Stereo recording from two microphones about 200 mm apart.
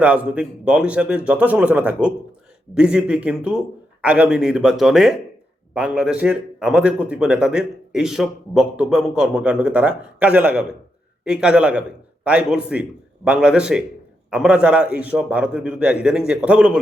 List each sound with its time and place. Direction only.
0.0 s a man's voice: 5° right (ahead or behind)